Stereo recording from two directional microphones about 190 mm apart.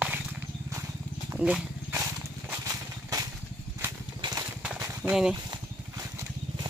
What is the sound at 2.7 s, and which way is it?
Engine, 20° right (ahead or behind).